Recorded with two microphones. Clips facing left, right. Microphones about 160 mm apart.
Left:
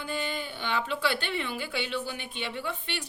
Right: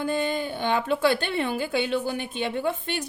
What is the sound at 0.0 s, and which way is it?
A woman's voice, 45° right (ahead or behind).